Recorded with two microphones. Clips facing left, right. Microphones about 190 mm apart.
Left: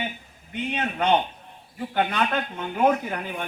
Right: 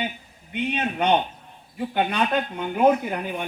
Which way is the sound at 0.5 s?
20° right (ahead or behind).